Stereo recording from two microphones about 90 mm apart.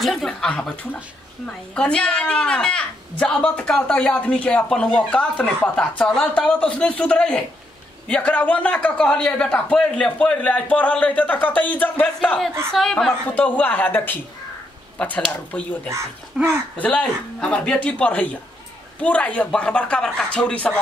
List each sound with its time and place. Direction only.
0.0 s speech: 5° left (ahead or behind)
1.8 s a woman's voice: 10° left (ahead or behind)
12.7 s speech: 5° left (ahead or behind)
13.3 s a woman's voice: 20° left (ahead or behind)
16.3 s speech: 5° right (ahead or behind)
16.8 s a woman's voice: 10° left (ahead or behind)